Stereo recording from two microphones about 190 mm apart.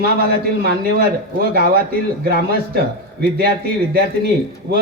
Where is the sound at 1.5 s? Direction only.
50° right (ahead or behind).